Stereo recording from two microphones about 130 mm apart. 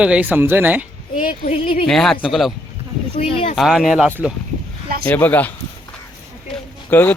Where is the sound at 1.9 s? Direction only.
5° left (ahead or behind).